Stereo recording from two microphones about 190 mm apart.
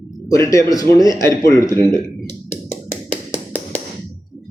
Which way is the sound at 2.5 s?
10° left (ahead or behind).